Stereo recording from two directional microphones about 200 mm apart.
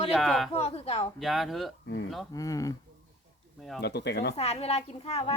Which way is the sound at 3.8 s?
55° left (ahead or behind).